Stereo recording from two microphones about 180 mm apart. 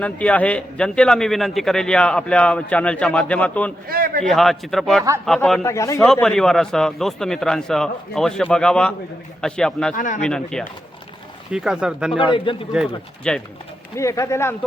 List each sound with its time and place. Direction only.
0.0 s speech: 5° left (ahead or behind)
3.8 s a man's voice: 55° right (ahead or behind)
4.2 s a man's voice: centre (ahead or behind)
5.6 s speech: 15° left (ahead or behind)
6.2 s a man's voice: 5° left (ahead or behind)
9.9 s speech: 45° left (ahead or behind)
10.2 s a man's voice: 5° left (ahead or behind)
12.1 s a man's voice: 25° left (ahead or behind)
12.7 s a man's voice: 5° right (ahead or behind)
13.9 s speech: 15° left (ahead or behind)